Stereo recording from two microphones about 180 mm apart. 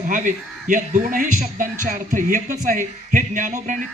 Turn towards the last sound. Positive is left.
turn(degrees=-45)  # may be behind; listen again after turning